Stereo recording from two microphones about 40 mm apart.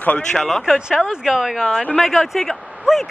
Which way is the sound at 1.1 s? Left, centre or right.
Centre.